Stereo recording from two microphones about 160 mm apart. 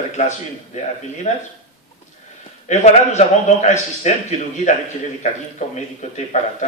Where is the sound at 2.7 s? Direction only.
45° left (ahead or behind).